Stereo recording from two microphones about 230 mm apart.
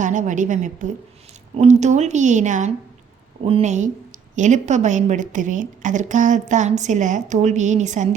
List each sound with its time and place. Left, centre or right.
0.0 s a woman's voice: right